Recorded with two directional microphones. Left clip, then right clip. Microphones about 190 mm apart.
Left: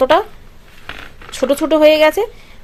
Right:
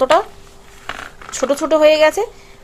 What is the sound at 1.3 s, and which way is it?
Speech, 20° left (ahead or behind).